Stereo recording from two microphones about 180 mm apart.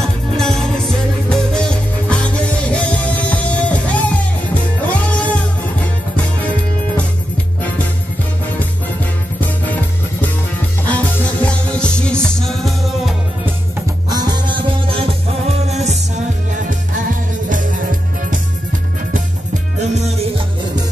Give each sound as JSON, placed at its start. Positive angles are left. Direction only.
{"t": 0.4, "sound": "music", "side_deg": 0}
{"t": 9.4, "sound": "music", "side_deg": 10}
{"t": 11.4, "sound": "music", "side_deg": 5}
{"t": 14.0, "sound": "music", "side_deg": -20}
{"t": 17.1, "sound": "music", "side_deg": -45}
{"t": 19.9, "sound": "music", "side_deg": -35}